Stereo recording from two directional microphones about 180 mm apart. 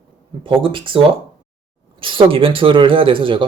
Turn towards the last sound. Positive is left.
turn(degrees=-25)  # may be behind; listen again after turning